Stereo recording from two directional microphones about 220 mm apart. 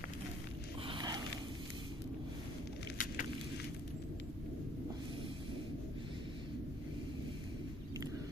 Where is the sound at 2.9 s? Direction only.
40° left (ahead or behind).